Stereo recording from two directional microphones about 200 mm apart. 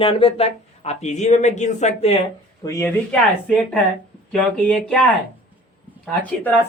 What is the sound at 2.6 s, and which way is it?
Speech, 15° left (ahead or behind).